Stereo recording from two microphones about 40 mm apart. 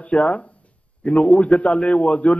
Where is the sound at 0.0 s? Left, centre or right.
Left.